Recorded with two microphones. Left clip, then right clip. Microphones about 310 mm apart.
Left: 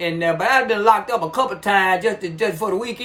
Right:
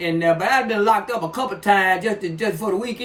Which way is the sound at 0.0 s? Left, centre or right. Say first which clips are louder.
Right 1 dB; centre.